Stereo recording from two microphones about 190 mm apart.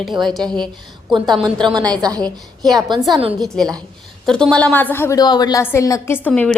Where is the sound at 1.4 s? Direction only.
25° right (ahead or behind).